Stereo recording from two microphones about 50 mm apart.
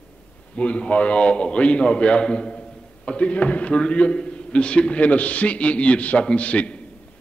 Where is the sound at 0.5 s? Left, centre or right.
Left.